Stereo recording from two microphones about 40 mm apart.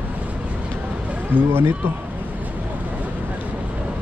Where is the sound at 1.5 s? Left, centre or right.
Right.